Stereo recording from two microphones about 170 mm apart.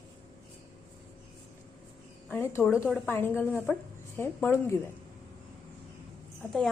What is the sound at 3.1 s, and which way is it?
A woman's voice, 15° left (ahead or behind).